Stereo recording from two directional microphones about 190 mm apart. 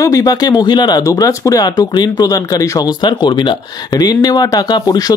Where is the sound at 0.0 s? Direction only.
20° left (ahead or behind).